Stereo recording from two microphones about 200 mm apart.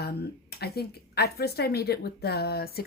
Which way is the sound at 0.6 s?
50° left (ahead or behind).